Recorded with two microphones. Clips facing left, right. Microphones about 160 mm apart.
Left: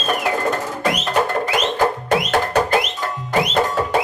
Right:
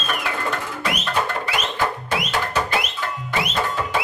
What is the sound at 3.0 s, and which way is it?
Music, 40° left (ahead or behind).